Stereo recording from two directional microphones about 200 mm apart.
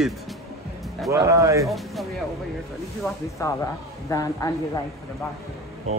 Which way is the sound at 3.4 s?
15° left (ahead or behind).